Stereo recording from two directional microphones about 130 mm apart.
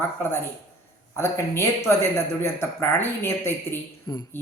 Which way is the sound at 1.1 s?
20° left (ahead or behind).